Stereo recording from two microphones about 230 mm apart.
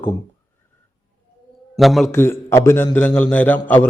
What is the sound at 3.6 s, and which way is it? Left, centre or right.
Speech, centre.